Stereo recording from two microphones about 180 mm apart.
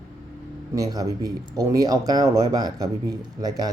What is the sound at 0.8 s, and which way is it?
Speech, 20° right (ahead or behind).